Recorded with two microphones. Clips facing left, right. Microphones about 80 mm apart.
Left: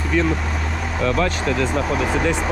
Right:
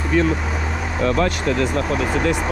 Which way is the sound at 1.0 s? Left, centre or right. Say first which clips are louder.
Right 1 dB; right.